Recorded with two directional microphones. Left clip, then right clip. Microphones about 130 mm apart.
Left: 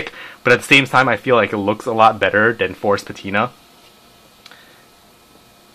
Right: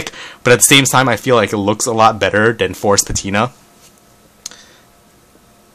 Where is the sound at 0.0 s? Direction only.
40° right (ahead or behind).